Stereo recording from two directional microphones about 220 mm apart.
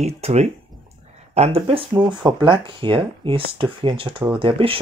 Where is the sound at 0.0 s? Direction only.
30° right (ahead or behind).